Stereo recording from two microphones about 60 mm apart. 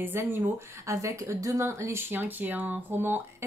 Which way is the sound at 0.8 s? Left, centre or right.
Right.